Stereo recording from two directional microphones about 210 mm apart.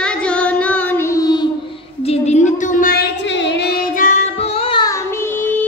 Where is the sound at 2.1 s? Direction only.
35° left (ahead or behind); by 3.7 s 55° left (ahead or behind).